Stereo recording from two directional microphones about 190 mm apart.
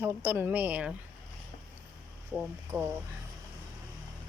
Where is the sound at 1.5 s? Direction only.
35° left (ahead or behind).